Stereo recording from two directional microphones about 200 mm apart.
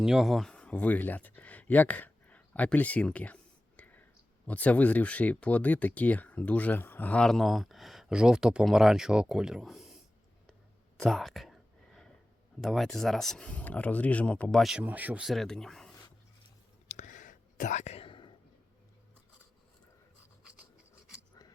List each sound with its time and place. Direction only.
0.0 s speech: centre (ahead or behind)
3.8 s whispering: 5° left (ahead or behind)
4.4 s speech: 5° left (ahead or behind)
10.9 s whispering: centre (ahead or behind)
12.5 s speech: centre (ahead or behind)
16.9 s whispering: 40° left (ahead or behind)